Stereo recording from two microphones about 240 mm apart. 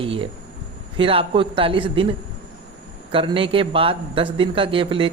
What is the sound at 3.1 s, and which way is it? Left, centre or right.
A man's voice, right.